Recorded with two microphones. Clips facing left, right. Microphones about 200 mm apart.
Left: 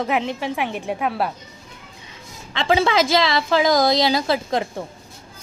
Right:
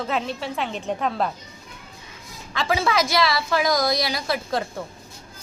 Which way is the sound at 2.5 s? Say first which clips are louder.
Left 4 dB; 25° left (ahead or behind).